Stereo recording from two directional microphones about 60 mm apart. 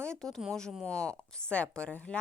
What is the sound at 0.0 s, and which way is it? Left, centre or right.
A woman's voice, centre.